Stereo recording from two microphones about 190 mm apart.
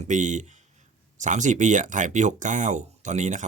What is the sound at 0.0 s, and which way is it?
Speech, 40° right (ahead or behind).